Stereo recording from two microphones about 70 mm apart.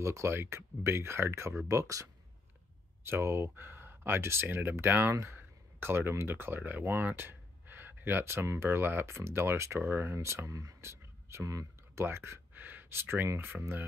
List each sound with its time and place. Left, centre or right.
0.0 s speech: right
3.0 s speech: right